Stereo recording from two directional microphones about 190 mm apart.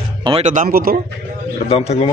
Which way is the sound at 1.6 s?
30° left (ahead or behind).